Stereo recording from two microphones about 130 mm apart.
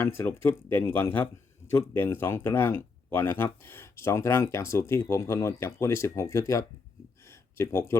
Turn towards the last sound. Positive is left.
turn(degrees=20)  # may be behind; listen again after turning